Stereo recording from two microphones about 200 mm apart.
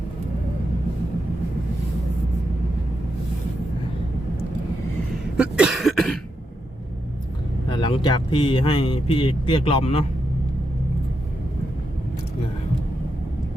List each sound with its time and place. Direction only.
5.4 s cough: 5° right (ahead or behind)
7.7 s speech: 25° left (ahead or behind)